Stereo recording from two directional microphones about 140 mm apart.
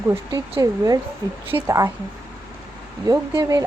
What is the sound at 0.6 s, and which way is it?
A woman's voice, 25° right (ahead or behind).